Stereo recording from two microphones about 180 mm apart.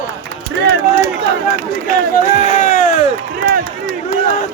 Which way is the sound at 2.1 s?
50° left (ahead or behind).